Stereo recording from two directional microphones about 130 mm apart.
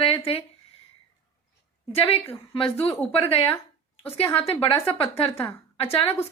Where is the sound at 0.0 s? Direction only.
45° left (ahead or behind).